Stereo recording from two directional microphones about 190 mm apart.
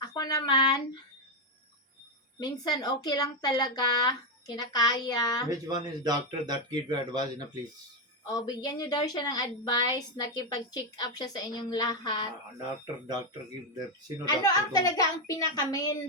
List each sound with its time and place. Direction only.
0.0 s speech: 20° left (ahead or behind)
2.4 s a woman's voice: 20° left (ahead or behind)
5.5 s speech: 20° right (ahead or behind)
8.3 s a woman's voice: 20° left (ahead or behind)
14.3 s a woman's voice: 20° left (ahead or behind)